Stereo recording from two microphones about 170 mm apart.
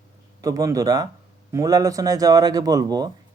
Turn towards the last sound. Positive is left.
turn(degrees=-25)  # may be behind; listen again after turning